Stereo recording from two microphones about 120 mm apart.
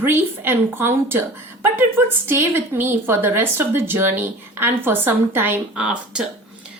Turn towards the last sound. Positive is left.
turn(degrees=-10)  # may be behind; listen again after turning